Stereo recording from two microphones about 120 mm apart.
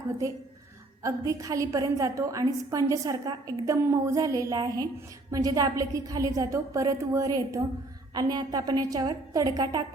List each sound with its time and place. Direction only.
1.0 s a woman's voice: 30° right (ahead or behind)